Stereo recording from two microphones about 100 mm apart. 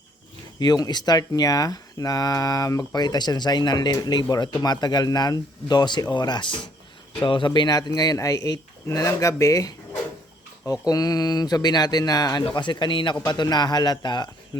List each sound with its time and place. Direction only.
0.6 s speech: 45° left (ahead or behind)
12.5 s speech: 50° left (ahead or behind)